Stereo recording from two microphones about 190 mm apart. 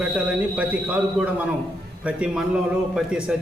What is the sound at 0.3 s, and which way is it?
A man's voice, 5° right (ahead or behind).